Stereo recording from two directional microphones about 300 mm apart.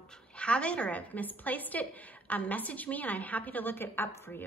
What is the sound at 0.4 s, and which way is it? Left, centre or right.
A woman's voice, centre.